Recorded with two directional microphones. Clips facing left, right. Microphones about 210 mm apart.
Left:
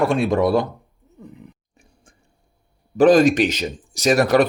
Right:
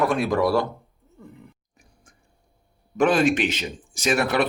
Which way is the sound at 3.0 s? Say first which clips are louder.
Left 6 dB; 40° left (ahead or behind).